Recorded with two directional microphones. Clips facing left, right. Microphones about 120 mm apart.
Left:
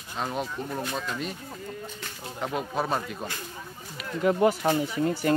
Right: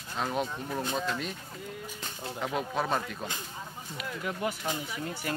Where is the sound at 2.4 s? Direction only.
Centre (ahead or behind).